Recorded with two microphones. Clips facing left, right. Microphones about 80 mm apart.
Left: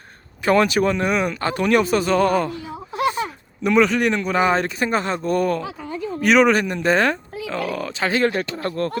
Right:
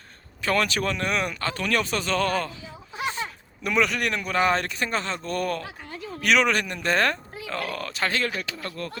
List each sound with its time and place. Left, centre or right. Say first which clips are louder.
0.4 s a man's voice: left 8 dB; centre
1.4 s speech: left 8 dB; centre
3.6 s a man's voice: left 7 dB; centre
8.6 s speech: left 10 dB; left